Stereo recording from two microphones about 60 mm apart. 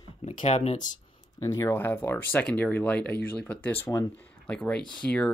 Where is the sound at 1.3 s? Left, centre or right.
Left.